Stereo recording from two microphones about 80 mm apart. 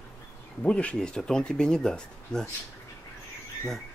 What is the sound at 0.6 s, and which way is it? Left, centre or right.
Speech, centre.